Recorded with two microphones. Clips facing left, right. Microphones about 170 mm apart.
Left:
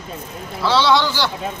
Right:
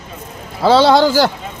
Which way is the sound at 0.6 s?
50° right (ahead or behind).